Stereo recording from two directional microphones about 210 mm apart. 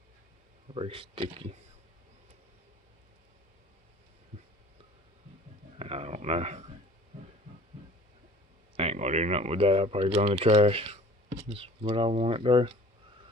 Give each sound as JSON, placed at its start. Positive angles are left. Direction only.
{"t": 0.7, "sound": "speech", "side_deg": -25}
{"t": 5.8, "sound": "a sound", "side_deg": -30}
{"t": 7.1, "sound": "heart murmur", "side_deg": -35}
{"t": 8.7, "sound": "speech", "side_deg": -30}